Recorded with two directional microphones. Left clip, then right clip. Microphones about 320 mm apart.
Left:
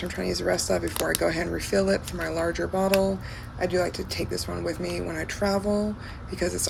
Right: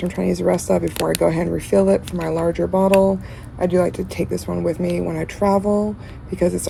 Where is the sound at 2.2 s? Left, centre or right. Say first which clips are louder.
Right 5 dB; right.